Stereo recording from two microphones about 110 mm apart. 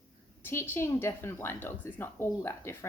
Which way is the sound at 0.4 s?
20° left (ahead or behind).